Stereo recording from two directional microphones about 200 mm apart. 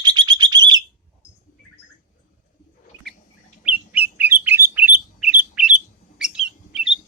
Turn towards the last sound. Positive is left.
turn(degrees=-5)  # may be behind; listen again after turning